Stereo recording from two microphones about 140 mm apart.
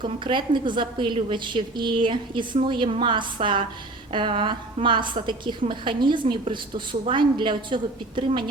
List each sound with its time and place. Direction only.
0.0 s a woman's voice: 35° right (ahead or behind)